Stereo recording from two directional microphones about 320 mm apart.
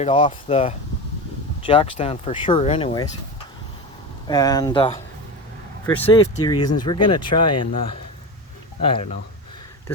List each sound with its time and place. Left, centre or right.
0.0 s speech: centre
4.3 s speech: centre